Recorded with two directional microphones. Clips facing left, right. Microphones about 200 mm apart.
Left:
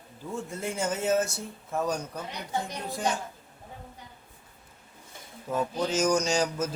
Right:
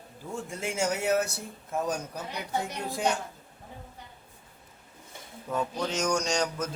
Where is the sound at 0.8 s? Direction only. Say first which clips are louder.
Right 1 dB; 70° right (ahead or behind).